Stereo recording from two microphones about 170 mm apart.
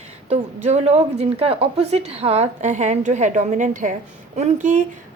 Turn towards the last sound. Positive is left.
turn(degrees=-50)  # may be behind; listen again after turning